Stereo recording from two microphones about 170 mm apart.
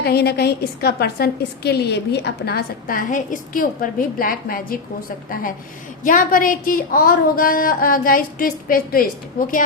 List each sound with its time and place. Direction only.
0.0 s a woman's voice: 70° left (ahead or behind)